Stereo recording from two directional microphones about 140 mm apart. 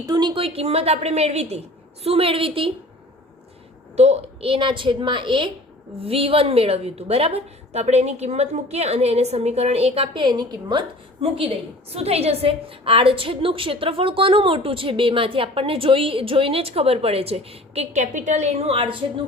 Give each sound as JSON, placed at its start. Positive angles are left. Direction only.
{"t": 0.0, "sound": "a woman's voice", "side_deg": -30}
{"t": 3.9, "sound": "a woman's voice", "side_deg": -50}